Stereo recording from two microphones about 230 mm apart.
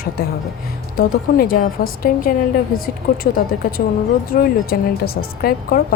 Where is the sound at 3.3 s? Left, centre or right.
Left.